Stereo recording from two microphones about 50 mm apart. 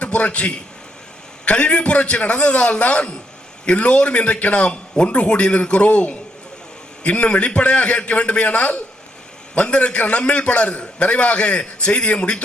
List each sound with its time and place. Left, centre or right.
0.0 s a man's voice: left